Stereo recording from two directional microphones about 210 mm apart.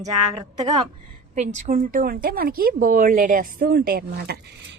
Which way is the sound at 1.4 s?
35° right (ahead or behind).